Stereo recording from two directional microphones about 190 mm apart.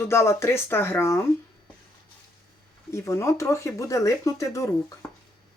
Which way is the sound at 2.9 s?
15° left (ahead or behind).